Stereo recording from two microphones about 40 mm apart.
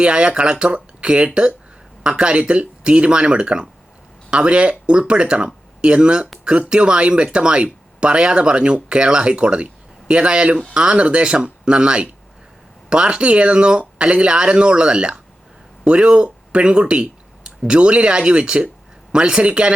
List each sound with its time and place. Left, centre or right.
0.0 s speech: right